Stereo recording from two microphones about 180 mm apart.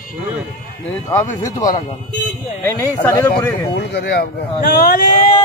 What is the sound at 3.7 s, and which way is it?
Speech, 70° left (ahead or behind).